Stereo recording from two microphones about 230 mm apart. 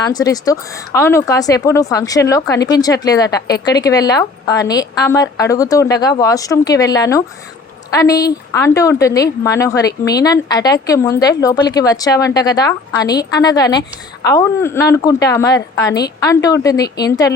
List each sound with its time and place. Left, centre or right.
0.0 s speech: centre